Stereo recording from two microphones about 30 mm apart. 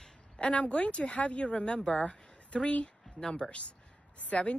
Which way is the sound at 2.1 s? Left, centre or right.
Left.